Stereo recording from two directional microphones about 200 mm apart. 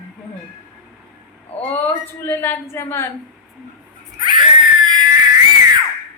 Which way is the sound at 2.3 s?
10° left (ahead or behind).